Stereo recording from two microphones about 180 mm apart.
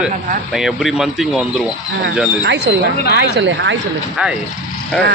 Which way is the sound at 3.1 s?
75° right (ahead or behind).